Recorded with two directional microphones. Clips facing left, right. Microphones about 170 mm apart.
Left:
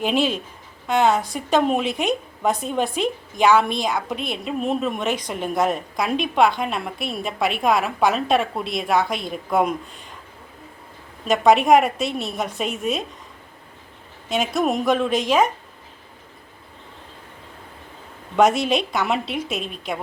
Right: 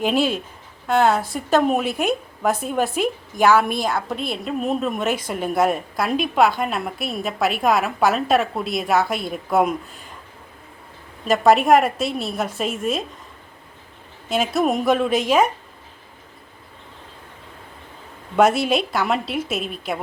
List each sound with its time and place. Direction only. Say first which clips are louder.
0.0 s a woman's voice: right 1 dB; 5° right (ahead or behind)
3.8 s a woman's voice: right 1 dB; 15° left (ahead or behind)
4.1 s a woman's voice: right 1 dB; centre (ahead or behind)
11.3 s a woman's voice: even; centre (ahead or behind)
14.3 s a woman's voice: right 1 dB; 5° right (ahead or behind)
18.3 s a woman's voice: right 1 dB; 5° right (ahead or behind)